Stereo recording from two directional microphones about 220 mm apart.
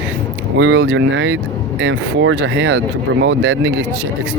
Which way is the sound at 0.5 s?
60° right (ahead or behind).